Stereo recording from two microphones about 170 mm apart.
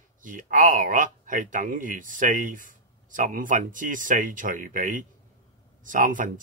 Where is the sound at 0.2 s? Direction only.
50° right (ahead or behind).